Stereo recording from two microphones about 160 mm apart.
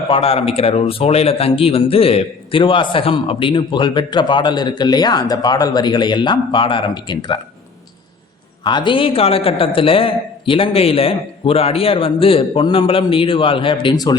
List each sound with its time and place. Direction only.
0.1 s a man's voice: 35° left (ahead or behind)
8.6 s a man's voice: 30° left (ahead or behind)